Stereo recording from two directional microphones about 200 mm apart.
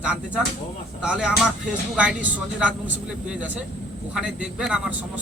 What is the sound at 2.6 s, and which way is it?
A man's voice, 5° right (ahead or behind).